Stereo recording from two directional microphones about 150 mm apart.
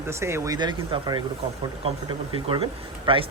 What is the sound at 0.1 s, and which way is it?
Speech, 20° right (ahead or behind).